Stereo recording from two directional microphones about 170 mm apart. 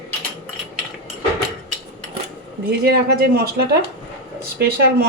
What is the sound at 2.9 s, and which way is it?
Speech, 65° right (ahead or behind).